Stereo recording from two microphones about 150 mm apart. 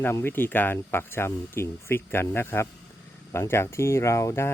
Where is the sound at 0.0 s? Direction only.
15° left (ahead or behind).